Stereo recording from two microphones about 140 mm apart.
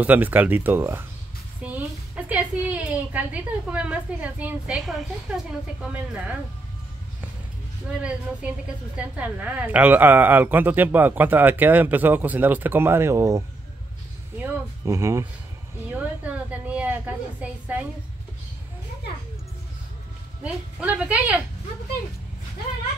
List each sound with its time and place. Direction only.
0.0 s a woman's voice: 10° right (ahead or behind)
8.0 s a woman's voice: 10° right (ahead or behind)
14.9 s speech: 20° right (ahead or behind)
15.9 s a sound: 10° right (ahead or behind)
20.4 s a woman's voice: 10° right (ahead or behind)